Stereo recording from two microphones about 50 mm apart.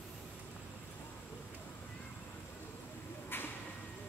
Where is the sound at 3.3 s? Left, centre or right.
Left.